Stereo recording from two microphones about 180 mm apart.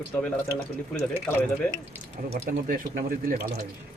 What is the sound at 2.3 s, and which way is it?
Speech, 50° right (ahead or behind).